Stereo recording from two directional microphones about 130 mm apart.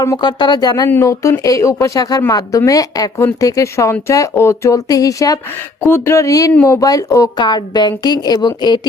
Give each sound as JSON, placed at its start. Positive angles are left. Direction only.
{"t": 0.0, "sound": "a woman's voice", "side_deg": 30}
{"t": 6.5, "sound": "speech", "side_deg": 15}
{"t": 6.7, "sound": "a woman's voice", "side_deg": 25}